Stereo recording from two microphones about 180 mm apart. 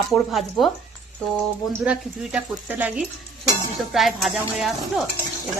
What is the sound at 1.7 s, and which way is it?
A woman's voice, 5° right (ahead or behind).